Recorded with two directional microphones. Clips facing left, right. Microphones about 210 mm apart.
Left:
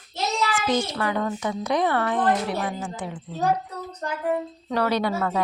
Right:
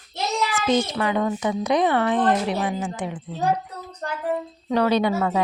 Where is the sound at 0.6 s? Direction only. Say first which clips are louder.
Right 4 dB; 20° right (ahead or behind).